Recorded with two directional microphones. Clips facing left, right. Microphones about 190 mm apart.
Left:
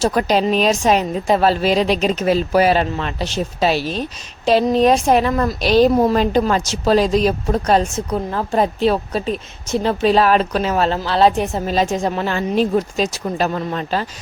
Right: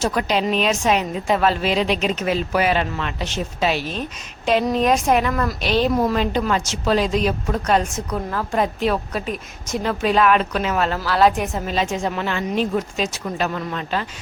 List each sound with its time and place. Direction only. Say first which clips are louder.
0.0 s a woman's voice: left 4 dB; 40° left (ahead or behind)